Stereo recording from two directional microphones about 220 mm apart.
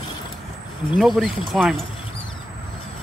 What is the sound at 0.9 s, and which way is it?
Speech, centre (ahead or behind).